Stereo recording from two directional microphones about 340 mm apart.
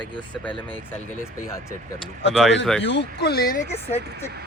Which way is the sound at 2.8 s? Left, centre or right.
Left.